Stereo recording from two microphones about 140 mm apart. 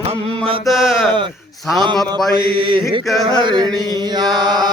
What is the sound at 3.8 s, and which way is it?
Chant, 30° right (ahead or behind).